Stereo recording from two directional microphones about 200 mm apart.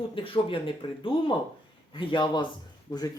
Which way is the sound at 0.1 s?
25° left (ahead or behind).